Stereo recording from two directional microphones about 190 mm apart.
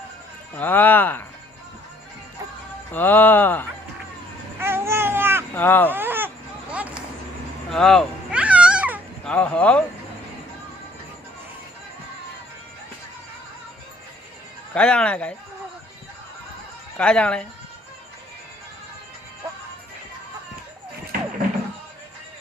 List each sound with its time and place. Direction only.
0.5 s speech: 10° left (ahead or behind)
2.9 s speech: 10° left (ahead or behind)
4.6 s baby cry: 15° right (ahead or behind)
5.5 s speech: 10° left (ahead or behind)
5.9 s a sound: 10° right (ahead or behind)
7.7 s cat: centre (ahead or behind)
9.2 s speech: 5° left (ahead or behind)
14.7 s speech: 5° left (ahead or behind)
17.0 s speech: 5° left (ahead or behind)